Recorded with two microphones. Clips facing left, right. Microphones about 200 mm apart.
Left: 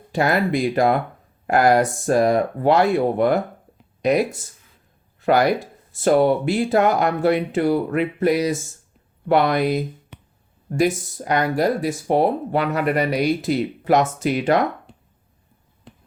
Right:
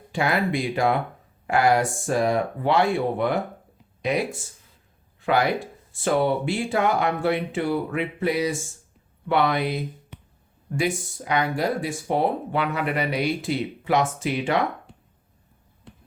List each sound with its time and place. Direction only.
0.1 s speech: 40° left (ahead or behind)